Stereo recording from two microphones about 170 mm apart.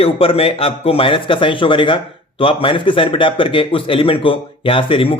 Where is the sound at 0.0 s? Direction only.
35° left (ahead or behind).